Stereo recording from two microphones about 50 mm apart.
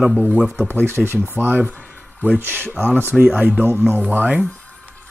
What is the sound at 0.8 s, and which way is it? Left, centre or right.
Speech, right.